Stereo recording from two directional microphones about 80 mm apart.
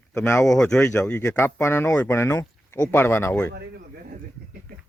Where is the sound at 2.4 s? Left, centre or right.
Left.